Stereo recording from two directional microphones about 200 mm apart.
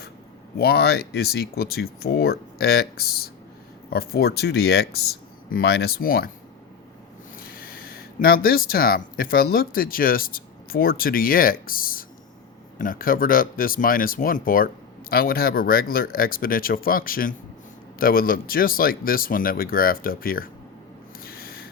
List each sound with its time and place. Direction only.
0.5 s speech: 50° left (ahead or behind)
7.3 s speech: 45° left (ahead or behind)
21.2 s a sound: 50° left (ahead or behind)